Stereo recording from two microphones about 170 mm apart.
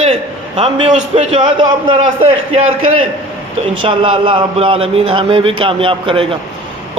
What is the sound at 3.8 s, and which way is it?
A man's voice, 30° right (ahead or behind).